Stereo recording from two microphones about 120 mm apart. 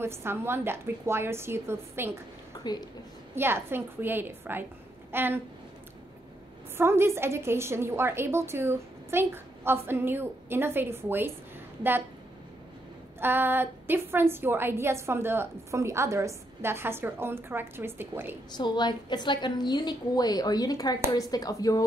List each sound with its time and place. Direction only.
0.0 s a woman's voice: 20° right (ahead or behind)
2.5 s speech: 35° left (ahead or behind)
3.3 s a woman's voice: 20° right (ahead or behind)
6.8 s a woman's voice: 20° right (ahead or behind)
13.2 s a woman's voice: 15° right (ahead or behind)
18.6 s a woman's voice: 40° left (ahead or behind)